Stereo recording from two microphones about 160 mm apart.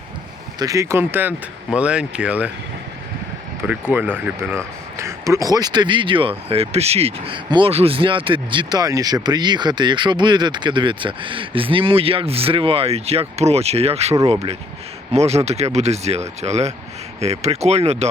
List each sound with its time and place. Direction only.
0.6 s speech: 20° right (ahead or behind)
3.7 s speech: 10° right (ahead or behind); by 18.1 s 40° right (ahead or behind)